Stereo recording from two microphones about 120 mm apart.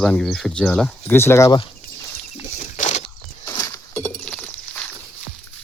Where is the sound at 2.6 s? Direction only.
85° left.